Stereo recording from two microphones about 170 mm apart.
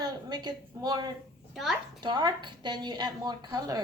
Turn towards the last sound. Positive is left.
turn(degrees=-20)  # may be behind; listen again after turning